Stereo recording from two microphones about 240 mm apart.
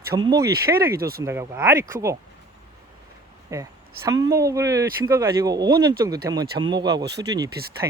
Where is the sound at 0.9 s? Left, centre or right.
Right.